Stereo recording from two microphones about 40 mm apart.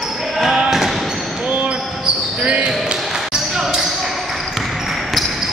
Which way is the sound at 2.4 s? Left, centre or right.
Right.